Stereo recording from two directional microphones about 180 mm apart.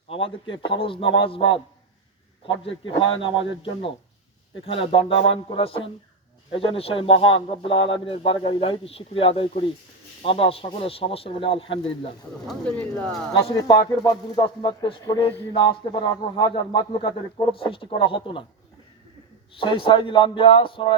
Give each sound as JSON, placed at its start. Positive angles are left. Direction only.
{"t": 0.5, "sound": "speech", "side_deg": 30}
{"t": 2.6, "sound": "speech", "side_deg": 30}
{"t": 12.5, "sound": "speech", "side_deg": 5}
{"t": 13.6, "sound": "speech", "side_deg": 20}
{"t": 19.5, "sound": "speech", "side_deg": 30}